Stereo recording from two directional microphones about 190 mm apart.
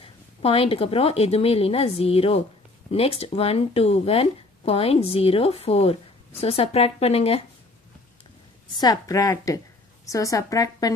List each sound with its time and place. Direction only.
0.0 s speech: 30° left (ahead or behind)
8.7 s a woman's voice: 20° left (ahead or behind)